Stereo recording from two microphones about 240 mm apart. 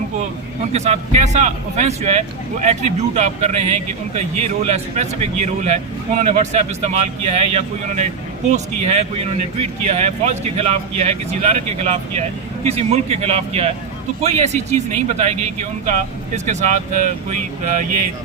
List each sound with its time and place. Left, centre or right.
0.7 s speech: right